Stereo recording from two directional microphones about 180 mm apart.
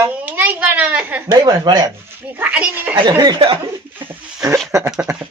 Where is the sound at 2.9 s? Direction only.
20° right (ahead or behind).